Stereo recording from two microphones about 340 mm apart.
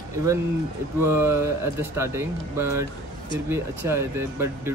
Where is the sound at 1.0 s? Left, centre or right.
Centre.